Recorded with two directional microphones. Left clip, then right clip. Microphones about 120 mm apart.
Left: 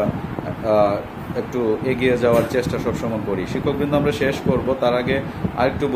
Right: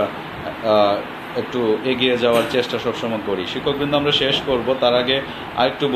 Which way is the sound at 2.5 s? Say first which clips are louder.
Right 2 dB; 45° left (ahead or behind).